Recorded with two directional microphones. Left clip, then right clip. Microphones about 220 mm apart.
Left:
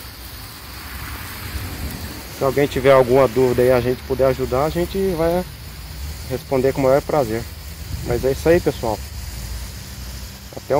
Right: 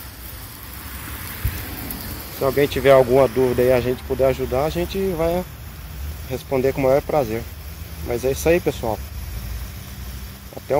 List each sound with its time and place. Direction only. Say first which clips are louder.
2.3 s speech: left 1 dB; 30° left (ahead or behind)
3.5 s speech: left 2 dB; 25° left (ahead or behind)